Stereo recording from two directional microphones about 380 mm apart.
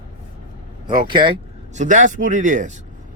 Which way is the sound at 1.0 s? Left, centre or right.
Centre.